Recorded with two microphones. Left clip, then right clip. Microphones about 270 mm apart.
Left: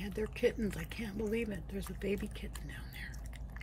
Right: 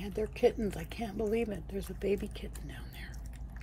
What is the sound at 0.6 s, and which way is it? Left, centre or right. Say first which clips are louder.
Speech: right 3 dB; centre.